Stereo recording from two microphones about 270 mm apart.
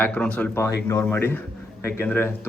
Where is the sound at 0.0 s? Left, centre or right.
Centre.